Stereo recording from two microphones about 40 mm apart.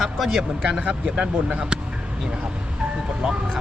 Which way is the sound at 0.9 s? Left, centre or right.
Centre.